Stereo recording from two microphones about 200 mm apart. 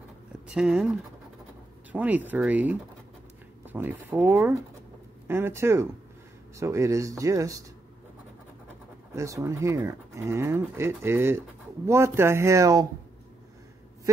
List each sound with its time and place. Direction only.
0.5 s speech: 5° right (ahead or behind)
1.9 s speech: 10° right (ahead or behind)
9.1 s speech: 15° right (ahead or behind)
14.1 s speech: 15° right (ahead or behind)